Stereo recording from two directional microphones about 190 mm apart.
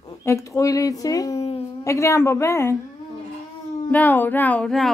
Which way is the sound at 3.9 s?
10° left (ahead or behind).